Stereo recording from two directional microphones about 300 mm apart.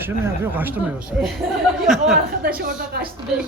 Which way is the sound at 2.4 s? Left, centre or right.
Right.